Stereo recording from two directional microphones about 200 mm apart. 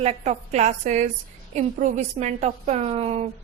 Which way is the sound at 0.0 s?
30° right (ahead or behind).